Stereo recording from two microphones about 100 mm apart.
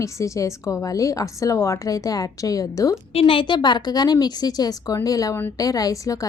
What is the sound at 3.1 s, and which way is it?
A woman's voice, 65° left (ahead or behind).